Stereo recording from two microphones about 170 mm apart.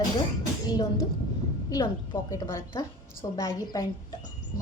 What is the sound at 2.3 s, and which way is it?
A woman's voice, 15° left (ahead or behind).